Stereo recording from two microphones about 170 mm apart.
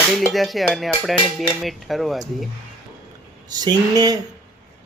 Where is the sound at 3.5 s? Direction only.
25° right (ahead or behind).